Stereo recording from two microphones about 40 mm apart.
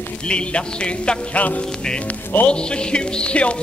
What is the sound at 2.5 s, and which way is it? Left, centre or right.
Music, left.